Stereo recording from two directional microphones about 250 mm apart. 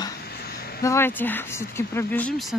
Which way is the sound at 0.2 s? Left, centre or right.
Left.